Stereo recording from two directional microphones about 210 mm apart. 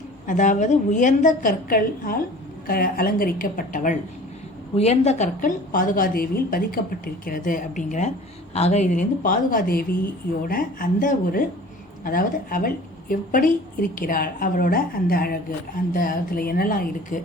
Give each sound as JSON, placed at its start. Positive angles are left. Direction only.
{"t": 0.3, "sound": "a woman's voice", "side_deg": 35}